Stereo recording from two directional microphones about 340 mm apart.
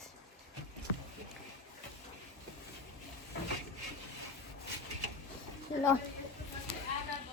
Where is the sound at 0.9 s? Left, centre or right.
Left.